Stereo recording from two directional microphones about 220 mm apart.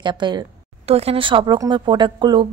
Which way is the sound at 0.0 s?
20° right (ahead or behind).